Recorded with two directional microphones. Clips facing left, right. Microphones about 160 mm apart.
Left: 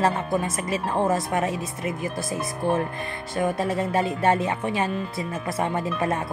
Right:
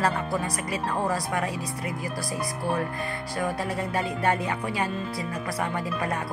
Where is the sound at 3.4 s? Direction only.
25° left (ahead or behind).